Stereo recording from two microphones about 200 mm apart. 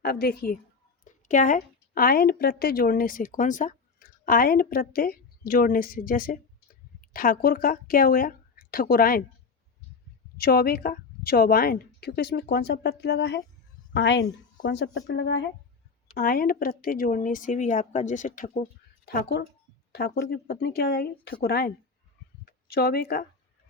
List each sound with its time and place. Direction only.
0.0 s a woman's voice: 50° left (ahead or behind)
10.4 s a woman's voice: 50° left (ahead or behind)
16.1 s speech: 50° left (ahead or behind)